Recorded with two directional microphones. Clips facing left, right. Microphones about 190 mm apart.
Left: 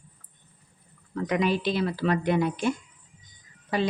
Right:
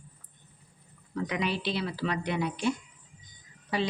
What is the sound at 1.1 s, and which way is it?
A woman's voice, 45° left (ahead or behind).